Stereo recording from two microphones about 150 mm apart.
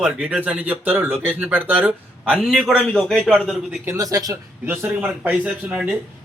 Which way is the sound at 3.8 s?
20° right (ahead or behind).